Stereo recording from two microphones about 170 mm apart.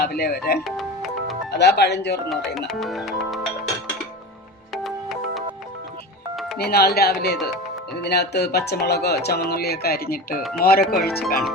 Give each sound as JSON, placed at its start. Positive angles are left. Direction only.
{"t": 0.0, "sound": "speech", "side_deg": 65}
{"t": 0.8, "sound": "music", "side_deg": 0}
{"t": 1.5, "sound": "speech", "side_deg": 80}
{"t": 2.6, "sound": "speech", "side_deg": 0}
{"t": 4.7, "sound": "music", "side_deg": 0}
{"t": 6.6, "sound": "speech", "side_deg": 65}